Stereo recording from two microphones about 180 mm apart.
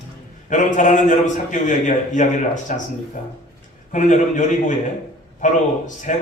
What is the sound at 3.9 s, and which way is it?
A man's voice, 45° left (ahead or behind).